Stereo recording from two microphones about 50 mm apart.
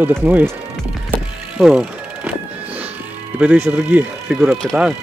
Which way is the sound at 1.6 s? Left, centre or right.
Centre.